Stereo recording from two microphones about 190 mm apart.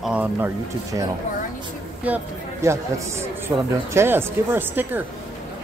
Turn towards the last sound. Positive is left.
turn(degrees=-10)  # may be behind; listen again after turning